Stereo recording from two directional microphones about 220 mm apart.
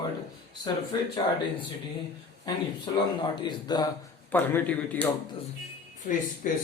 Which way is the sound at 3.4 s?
20° left (ahead or behind).